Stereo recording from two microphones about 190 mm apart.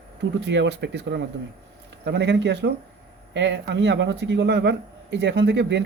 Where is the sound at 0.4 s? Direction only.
70° right (ahead or behind).